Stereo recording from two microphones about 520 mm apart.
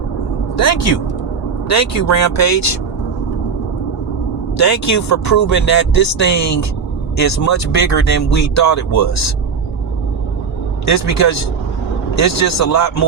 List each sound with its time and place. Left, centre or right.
0.5 s speech: left
4.5 s speech: left
10.8 s speech: left